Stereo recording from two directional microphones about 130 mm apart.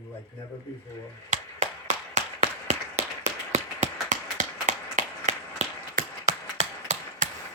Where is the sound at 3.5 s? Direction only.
70° right (ahead or behind).